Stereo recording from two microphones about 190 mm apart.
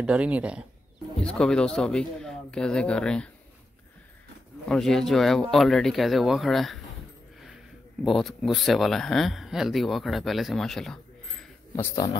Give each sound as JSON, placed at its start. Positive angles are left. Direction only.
{"t": 0.0, "sound": "speech", "side_deg": -5}
{"t": 1.2, "sound": "speech", "side_deg": 5}
{"t": 4.6, "sound": "speech", "side_deg": 0}
{"t": 8.0, "sound": "speech", "side_deg": 0}
{"t": 11.7, "sound": "speech", "side_deg": 15}